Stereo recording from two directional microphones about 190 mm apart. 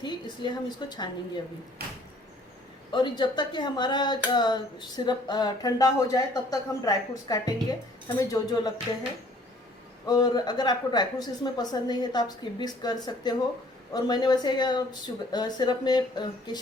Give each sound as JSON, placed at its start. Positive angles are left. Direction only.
{"t": 0.0, "sound": "a woman's voice", "side_deg": 25}
{"t": 2.9, "sound": "speech", "side_deg": 25}
{"t": 10.1, "sound": "speech", "side_deg": 20}